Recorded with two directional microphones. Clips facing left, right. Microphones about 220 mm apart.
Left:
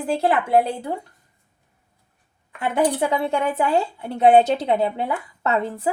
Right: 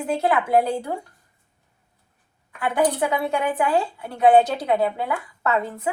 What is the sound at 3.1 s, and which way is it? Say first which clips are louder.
A woman's voice: left 1 dB; 25° left (ahead or behind).